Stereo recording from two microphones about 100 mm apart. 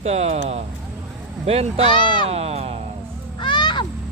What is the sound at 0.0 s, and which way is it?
Speech, 90° right.